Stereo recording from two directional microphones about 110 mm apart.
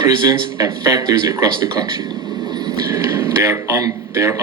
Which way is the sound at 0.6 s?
35° right (ahead or behind).